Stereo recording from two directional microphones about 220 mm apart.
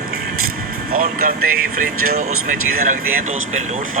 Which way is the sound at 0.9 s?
40° right (ahead or behind).